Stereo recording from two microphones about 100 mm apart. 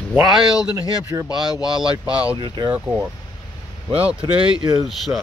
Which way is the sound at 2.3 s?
45° right (ahead or behind).